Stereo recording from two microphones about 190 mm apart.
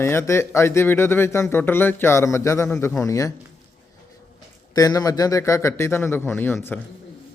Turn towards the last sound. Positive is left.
turn(degrees=10)  # may be behind; listen again after turning